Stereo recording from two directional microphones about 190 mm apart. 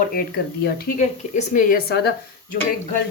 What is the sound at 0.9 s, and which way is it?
Speech, 40° left (ahead or behind).